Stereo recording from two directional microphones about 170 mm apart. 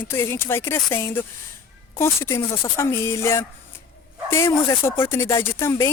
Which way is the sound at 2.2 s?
20° left (ahead or behind).